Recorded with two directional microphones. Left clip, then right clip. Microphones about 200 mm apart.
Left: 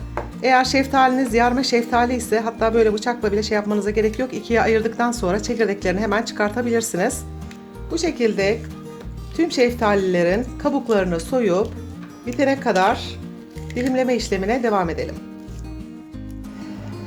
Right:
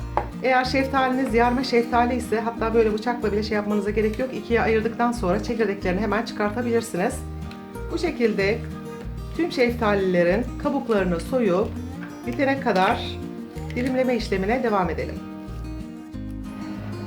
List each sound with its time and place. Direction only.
0.4 s a woman's voice: 40° left (ahead or behind)